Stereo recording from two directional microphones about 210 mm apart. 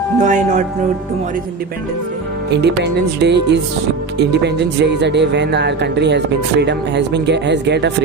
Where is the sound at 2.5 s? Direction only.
55° right (ahead or behind).